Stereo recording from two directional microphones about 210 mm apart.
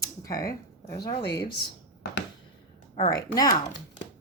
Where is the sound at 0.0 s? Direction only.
15° left (ahead or behind).